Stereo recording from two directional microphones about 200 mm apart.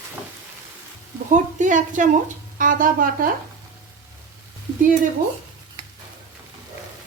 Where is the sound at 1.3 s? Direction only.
40° right (ahead or behind).